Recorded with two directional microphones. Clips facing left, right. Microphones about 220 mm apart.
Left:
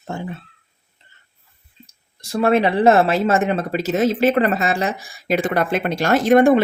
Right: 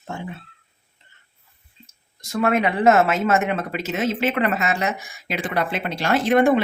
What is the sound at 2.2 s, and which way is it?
Speech, 30° left (ahead or behind).